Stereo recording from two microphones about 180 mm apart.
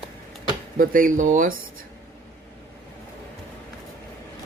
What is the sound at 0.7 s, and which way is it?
Speech, 50° right (ahead or behind).